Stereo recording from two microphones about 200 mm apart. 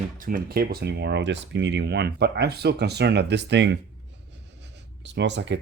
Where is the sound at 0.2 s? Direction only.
45° right (ahead or behind).